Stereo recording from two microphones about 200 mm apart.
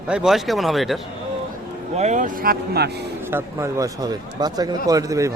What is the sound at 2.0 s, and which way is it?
Speech, 35° right (ahead or behind).